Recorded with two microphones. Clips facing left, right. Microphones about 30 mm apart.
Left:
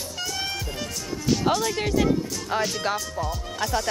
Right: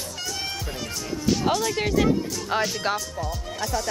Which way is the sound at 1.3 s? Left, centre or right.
Centre.